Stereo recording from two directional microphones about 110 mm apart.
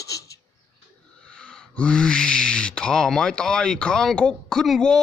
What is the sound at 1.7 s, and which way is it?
Speech, 10° left (ahead or behind).